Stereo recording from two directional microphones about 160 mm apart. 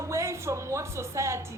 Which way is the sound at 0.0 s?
20° right (ahead or behind).